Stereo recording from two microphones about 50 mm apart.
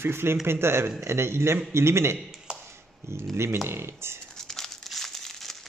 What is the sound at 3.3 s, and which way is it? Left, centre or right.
Speech, right.